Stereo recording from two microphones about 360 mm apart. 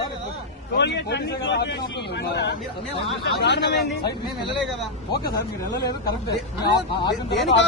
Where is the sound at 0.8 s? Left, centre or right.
Left.